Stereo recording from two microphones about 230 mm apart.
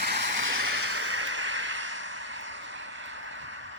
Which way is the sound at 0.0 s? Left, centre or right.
Right.